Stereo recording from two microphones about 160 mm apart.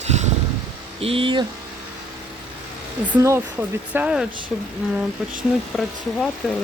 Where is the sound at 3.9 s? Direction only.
5° right (ahead or behind).